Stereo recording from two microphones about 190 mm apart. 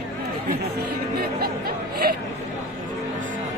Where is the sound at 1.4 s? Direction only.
55° right (ahead or behind).